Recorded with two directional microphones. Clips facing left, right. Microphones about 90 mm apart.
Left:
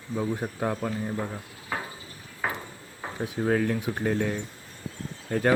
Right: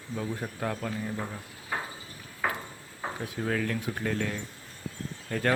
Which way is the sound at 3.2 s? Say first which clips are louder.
Left 6 dB; 25° left (ahead or behind).